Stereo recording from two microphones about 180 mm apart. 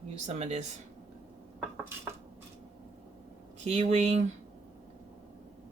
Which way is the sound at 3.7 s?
35° right (ahead or behind).